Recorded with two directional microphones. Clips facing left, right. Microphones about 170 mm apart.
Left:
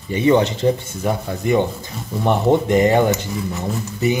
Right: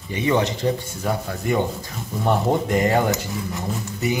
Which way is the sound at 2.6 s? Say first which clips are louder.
Left 5 dB; 25° left (ahead or behind).